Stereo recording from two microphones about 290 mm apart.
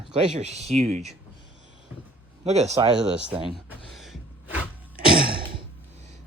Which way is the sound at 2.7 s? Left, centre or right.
Centre.